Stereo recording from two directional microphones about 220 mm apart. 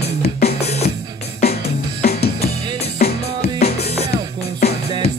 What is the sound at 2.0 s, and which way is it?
Music, 30° left (ahead or behind).